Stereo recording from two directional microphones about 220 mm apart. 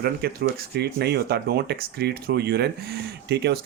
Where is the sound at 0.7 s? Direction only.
50° right (ahead or behind).